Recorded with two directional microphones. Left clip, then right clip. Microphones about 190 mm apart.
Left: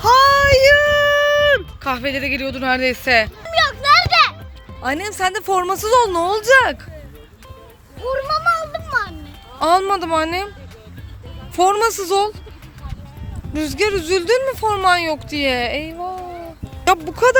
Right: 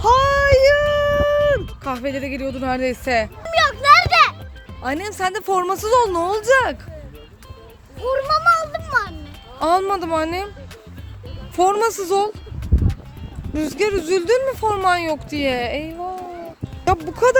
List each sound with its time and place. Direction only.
0.0 s a sound: 15° right (ahead or behind)
3.4 s music: 20° right (ahead or behind)
4.8 s speech: centre (ahead or behind)
8.3 s music: 15° right (ahead or behind)
9.6 s speech: 5° right (ahead or behind)
11.5 s speech: 5° right (ahead or behind)
13.5 s speech: 5° right (ahead or behind)